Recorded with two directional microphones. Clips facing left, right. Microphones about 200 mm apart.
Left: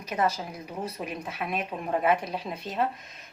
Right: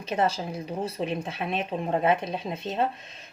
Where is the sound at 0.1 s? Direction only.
30° right (ahead or behind).